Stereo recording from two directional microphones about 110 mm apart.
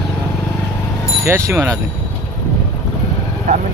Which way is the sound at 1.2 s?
25° right (ahead or behind).